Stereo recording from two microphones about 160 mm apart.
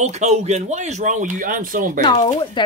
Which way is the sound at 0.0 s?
45° right (ahead or behind).